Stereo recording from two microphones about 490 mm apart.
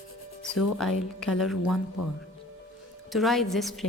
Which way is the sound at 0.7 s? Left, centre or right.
Centre.